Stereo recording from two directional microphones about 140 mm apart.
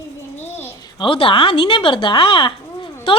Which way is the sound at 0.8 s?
35° left (ahead or behind).